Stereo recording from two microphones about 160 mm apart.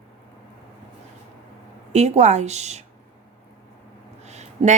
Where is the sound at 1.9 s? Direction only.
45° right (ahead or behind).